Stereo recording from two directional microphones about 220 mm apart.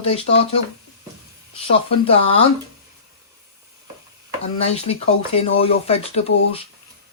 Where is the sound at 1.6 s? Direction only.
25° left (ahead or behind).